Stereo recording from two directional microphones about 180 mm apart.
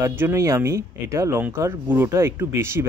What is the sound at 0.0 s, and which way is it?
Speech, 15° right (ahead or behind).